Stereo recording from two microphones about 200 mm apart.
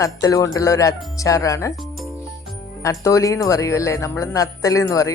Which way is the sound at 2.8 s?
15° left (ahead or behind).